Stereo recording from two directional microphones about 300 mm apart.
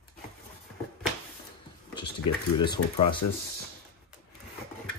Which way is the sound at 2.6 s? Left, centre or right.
Centre.